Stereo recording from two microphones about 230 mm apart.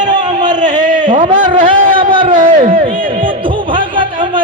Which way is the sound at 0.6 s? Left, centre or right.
Right.